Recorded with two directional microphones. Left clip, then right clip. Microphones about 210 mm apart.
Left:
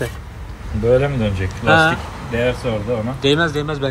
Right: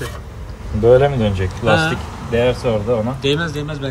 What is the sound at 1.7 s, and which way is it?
Speech, 10° right (ahead or behind).